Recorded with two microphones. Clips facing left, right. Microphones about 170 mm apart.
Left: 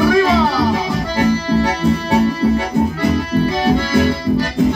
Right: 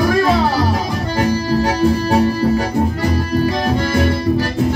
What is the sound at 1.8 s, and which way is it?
Music, 40° right (ahead or behind).